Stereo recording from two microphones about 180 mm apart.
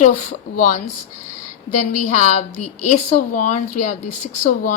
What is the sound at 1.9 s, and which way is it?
A woman's voice, 40° left (ahead or behind).